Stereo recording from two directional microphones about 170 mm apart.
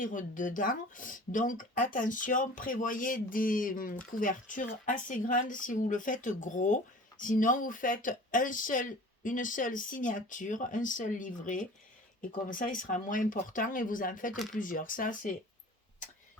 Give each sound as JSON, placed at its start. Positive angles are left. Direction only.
{"t": 0.0, "sound": "speech", "side_deg": 50}